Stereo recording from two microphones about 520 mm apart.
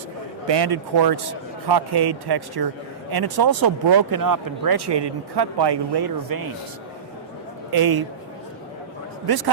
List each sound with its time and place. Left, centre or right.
0.4 s speech: right
7.7 s speech: right
9.2 s speech: right